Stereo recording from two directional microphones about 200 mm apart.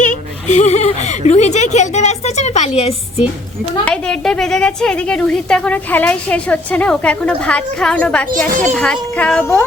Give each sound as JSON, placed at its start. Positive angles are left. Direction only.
{"t": 0.0, "sound": "speech", "side_deg": 35}
{"t": 3.8, "sound": "a woman's voice", "side_deg": 5}